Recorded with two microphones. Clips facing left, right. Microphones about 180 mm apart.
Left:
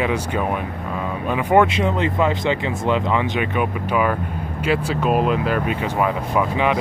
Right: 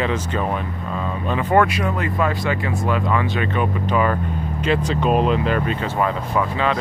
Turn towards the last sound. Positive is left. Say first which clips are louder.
# left 1 dB
turn(degrees=15)  # may be behind; listen again after turning